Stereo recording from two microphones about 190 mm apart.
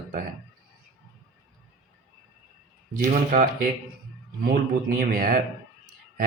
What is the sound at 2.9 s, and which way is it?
Speech, 45° right (ahead or behind).